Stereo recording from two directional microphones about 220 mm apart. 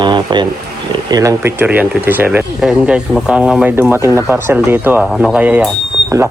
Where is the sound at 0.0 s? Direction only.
20° right (ahead or behind).